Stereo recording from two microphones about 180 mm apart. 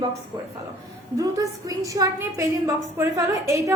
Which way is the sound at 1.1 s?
20° right (ahead or behind).